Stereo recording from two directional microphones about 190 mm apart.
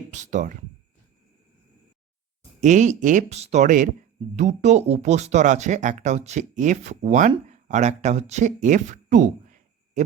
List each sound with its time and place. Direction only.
0.1 s speech: 40° right (ahead or behind)
2.6 s speech: 40° right (ahead or behind)